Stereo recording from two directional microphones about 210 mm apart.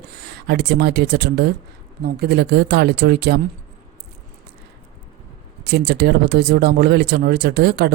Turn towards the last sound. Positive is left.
turn(degrees=-50)  # may be behind; listen again after turning